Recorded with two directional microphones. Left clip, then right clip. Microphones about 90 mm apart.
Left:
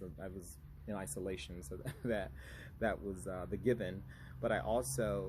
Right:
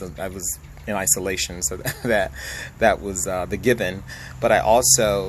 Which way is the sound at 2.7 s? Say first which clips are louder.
Right 19 dB; 30° left (ahead or behind).